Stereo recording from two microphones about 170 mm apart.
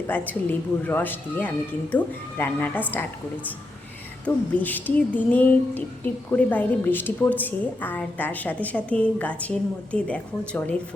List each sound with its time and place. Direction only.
0.1 s a woman's voice: 10° left (ahead or behind)
4.5 s a woman's voice: 10° left (ahead or behind)